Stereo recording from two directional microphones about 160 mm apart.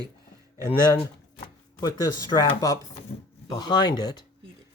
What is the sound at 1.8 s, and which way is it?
Speech, 25° left (ahead or behind).